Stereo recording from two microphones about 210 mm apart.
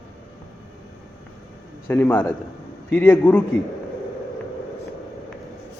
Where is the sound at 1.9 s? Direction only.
10° left (ahead or behind).